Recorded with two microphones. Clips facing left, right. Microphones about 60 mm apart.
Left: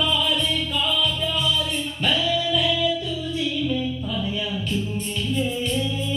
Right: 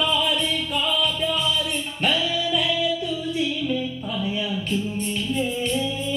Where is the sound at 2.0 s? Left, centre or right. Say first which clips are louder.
Even; right.